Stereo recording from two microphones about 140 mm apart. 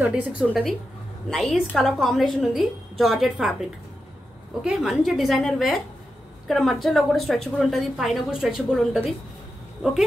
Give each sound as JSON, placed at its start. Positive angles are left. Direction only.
{"t": 0.0, "sound": "a woman's voice", "side_deg": -10}
{"t": 4.6, "sound": "a woman's voice", "side_deg": 0}